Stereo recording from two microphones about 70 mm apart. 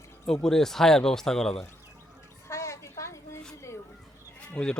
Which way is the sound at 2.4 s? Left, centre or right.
Left.